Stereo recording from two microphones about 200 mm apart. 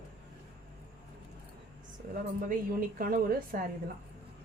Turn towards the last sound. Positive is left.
turn(degrees=-45)  # may be behind; listen again after turning